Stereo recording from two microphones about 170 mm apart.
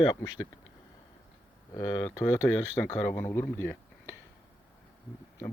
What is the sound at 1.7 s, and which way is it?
Speech, 20° left (ahead or behind).